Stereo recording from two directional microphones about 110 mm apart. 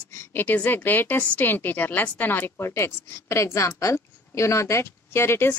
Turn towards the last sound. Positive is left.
turn(degrees=20)  # may be behind; listen again after turning